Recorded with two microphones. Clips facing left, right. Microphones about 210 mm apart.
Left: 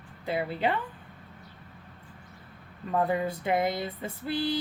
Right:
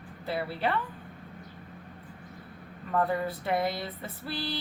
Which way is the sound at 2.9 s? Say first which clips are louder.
Left 1 dB; 15° left (ahead or behind).